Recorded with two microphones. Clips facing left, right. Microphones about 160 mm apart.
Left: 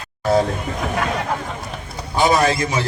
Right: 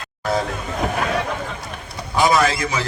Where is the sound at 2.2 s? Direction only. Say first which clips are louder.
Left 1 dB; 30° left (ahead or behind).